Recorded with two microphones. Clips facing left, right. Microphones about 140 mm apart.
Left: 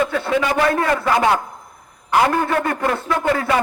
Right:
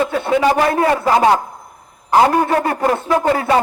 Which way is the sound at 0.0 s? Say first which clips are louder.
Right 4 dB; 30° right (ahead or behind).